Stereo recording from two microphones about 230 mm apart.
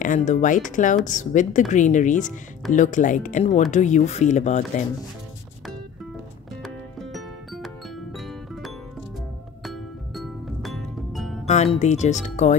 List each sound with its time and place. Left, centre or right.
0.0 s a woman's voice: left
6.6 s music: centre
11.4 s a woman's voice: left